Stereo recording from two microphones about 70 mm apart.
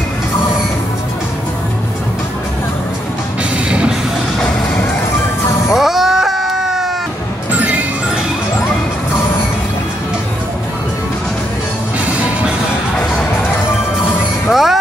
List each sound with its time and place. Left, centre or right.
3.6 s music: centre
5.7 s a sound: centre
7.5 s music: right
14.5 s music: centre